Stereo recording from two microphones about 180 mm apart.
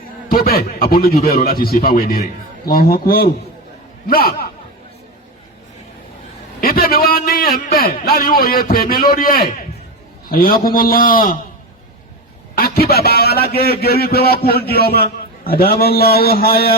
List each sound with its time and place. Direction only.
0.3 s a man's voice: 55° left (ahead or behind)
6.6 s a sound: 55° left (ahead or behind)
8.0 s a man's voice: 55° left (ahead or behind)
12.5 s a man's voice: 55° left (ahead or behind)